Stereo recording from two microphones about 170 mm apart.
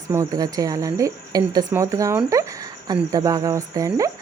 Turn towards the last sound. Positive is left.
turn(degrees=-20)  # may be behind; listen again after turning